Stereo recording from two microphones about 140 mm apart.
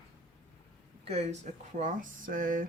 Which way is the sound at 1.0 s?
50° right (ahead or behind).